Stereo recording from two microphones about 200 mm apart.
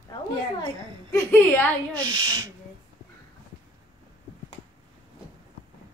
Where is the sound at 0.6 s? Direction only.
15° left (ahead or behind).